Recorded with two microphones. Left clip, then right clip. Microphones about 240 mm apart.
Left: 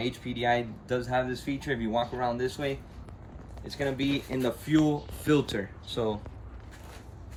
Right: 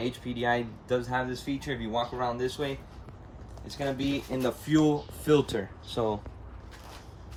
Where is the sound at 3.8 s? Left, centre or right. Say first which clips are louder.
Left 1 dB; centre.